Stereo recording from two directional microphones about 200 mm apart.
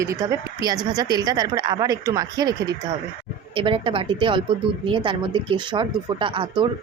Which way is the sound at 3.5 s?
25° right (ahead or behind).